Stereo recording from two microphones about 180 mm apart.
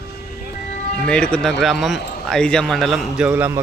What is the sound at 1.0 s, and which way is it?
Speech, 5° left (ahead or behind).